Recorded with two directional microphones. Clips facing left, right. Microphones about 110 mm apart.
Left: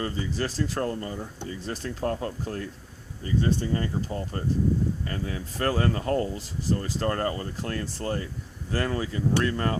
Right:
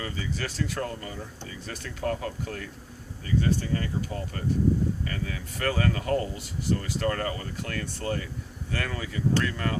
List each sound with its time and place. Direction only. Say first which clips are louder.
0.0 s speech: left 4 dB; 35° left (ahead or behind)